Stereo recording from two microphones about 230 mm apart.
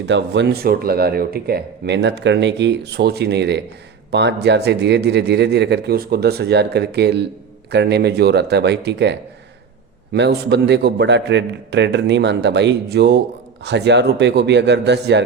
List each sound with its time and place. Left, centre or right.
0.0 s speech: right